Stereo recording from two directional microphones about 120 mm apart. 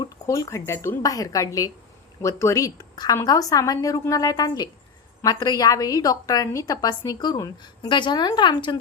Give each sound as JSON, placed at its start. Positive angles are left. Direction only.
{"t": 0.0, "sound": "a woman's voice", "side_deg": 30}